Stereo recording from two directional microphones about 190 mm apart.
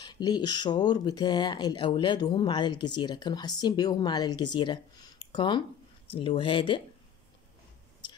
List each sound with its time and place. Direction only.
0.0 s speech: 20° left (ahead or behind)